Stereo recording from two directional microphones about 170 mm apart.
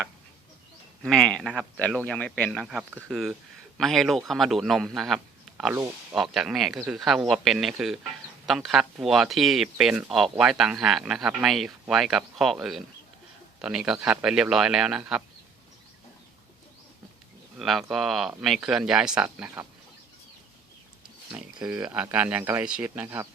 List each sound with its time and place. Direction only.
1.0 s speech: 5° left (ahead or behind)
2.0 s speech: 10° left (ahead or behind)
5.7 s speech: 15° right (ahead or behind)
6.1 s speech: 5° right (ahead or behind)
17.6 s speech: centre (ahead or behind)
21.3 s speech: 10° right (ahead or behind)